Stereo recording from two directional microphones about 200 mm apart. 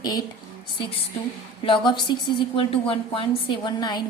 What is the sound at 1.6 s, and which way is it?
A woman's voice, 25° left (ahead or behind).